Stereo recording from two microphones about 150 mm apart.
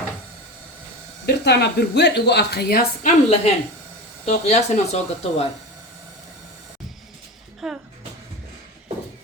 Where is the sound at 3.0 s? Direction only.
45° left (ahead or behind).